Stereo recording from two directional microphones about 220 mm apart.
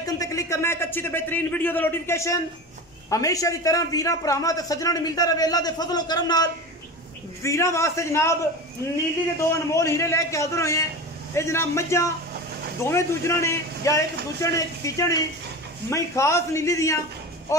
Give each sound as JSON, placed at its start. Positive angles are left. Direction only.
{"t": 0.0, "sound": "a man's voice", "side_deg": 15}
{"t": 9.5, "sound": "a man's voice", "side_deg": 15}